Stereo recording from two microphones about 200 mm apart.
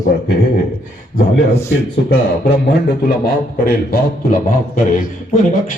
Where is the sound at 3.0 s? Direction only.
50° left (ahead or behind).